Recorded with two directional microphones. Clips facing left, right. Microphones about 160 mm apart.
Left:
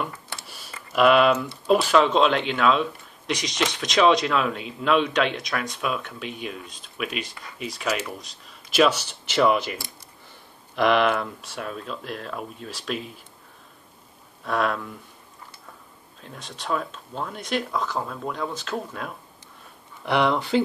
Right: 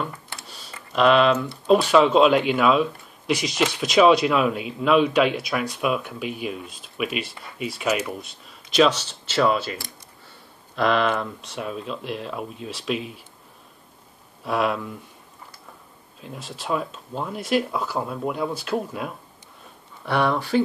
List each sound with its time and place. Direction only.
0.5 s speech: 10° left (ahead or behind)
10.8 s speech: 10° left (ahead or behind)
14.4 s speech: 5° right (ahead or behind)
16.2 s speech: 5° right (ahead or behind)
20.1 s speech: 20° left (ahead or behind)